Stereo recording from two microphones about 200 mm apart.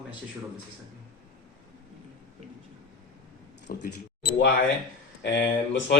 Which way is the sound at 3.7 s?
50° left (ahead or behind).